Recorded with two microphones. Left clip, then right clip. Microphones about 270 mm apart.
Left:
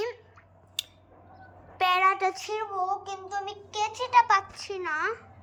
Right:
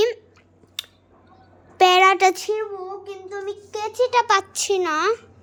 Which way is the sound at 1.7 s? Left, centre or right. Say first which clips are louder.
Right 9 dB; right.